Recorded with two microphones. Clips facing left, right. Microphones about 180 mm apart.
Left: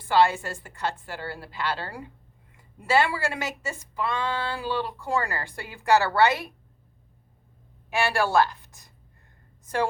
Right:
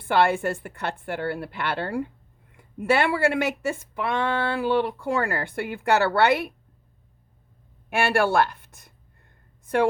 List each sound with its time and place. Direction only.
0.0 s speech: 60° right (ahead or behind)
7.9 s speech: 55° right (ahead or behind)